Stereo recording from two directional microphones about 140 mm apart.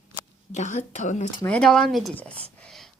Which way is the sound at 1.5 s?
5° left (ahead or behind).